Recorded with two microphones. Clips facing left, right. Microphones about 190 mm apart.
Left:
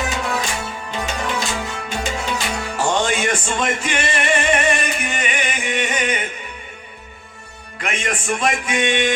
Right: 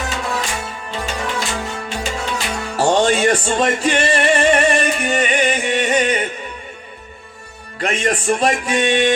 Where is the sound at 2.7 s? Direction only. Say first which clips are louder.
Right 6 dB; 35° right (ahead or behind).